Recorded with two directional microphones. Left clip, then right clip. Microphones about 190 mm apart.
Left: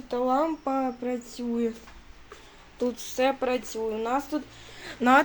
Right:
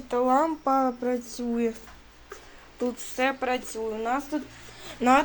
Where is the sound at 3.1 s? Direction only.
15° left (ahead or behind).